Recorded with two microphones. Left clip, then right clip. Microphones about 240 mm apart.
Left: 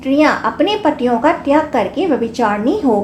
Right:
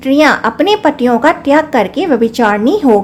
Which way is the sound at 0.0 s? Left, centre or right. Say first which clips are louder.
Right 4 dB; right.